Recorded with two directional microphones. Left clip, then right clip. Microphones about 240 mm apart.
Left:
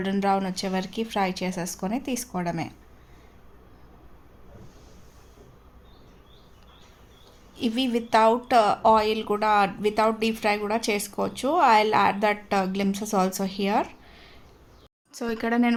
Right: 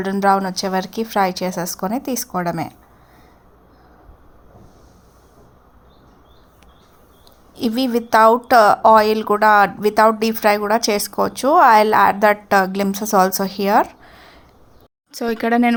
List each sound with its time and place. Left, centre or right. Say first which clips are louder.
0.0 s a woman's voice: right 8 dB; centre
7.5 s a woman's voice: right 7 dB; centre